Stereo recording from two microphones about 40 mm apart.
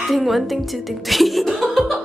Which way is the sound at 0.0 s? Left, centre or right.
Centre.